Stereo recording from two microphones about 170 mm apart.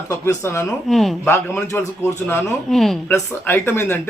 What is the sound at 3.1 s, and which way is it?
Speech, 15° left (ahead or behind).